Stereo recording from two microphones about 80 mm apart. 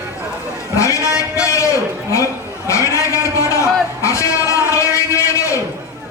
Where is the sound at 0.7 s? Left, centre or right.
Left.